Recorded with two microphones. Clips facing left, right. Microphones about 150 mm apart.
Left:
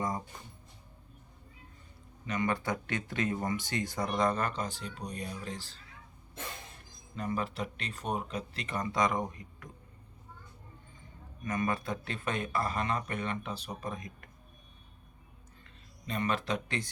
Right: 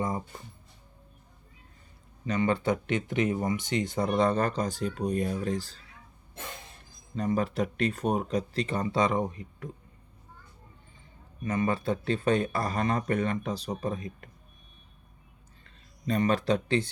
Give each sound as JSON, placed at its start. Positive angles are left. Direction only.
{"t": 2.2, "sound": "speech", "side_deg": -30}
{"t": 7.2, "sound": "speech", "side_deg": -40}
{"t": 11.4, "sound": "speech", "side_deg": -30}
{"t": 16.0, "sound": "speech", "side_deg": -40}